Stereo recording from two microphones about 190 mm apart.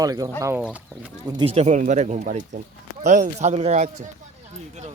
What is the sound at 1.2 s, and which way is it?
Speech, 25° right (ahead or behind).